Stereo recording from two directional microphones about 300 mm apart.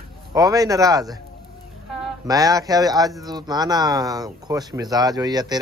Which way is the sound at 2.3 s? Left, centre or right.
Centre.